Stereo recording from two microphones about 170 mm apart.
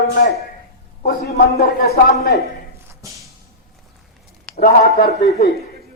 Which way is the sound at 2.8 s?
20° right (ahead or behind).